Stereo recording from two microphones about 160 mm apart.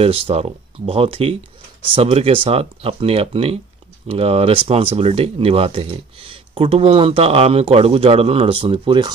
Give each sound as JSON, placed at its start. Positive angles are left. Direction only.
{"t": 0.0, "sound": "speech", "side_deg": -40}